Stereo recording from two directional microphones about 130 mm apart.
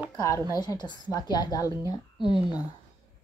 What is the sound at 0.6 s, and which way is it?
A woman's voice, 30° left (ahead or behind).